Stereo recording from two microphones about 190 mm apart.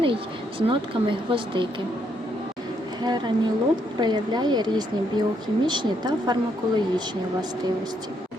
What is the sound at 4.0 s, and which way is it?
Speech, 20° right (ahead or behind).